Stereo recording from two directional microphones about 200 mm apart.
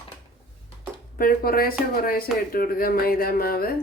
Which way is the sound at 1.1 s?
45° left (ahead or behind).